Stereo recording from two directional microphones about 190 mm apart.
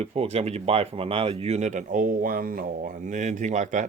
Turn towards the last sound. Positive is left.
turn(degrees=-40)  # may be behind; listen again after turning